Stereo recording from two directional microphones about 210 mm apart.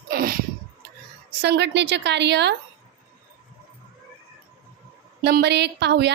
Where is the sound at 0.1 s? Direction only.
45° right (ahead or behind).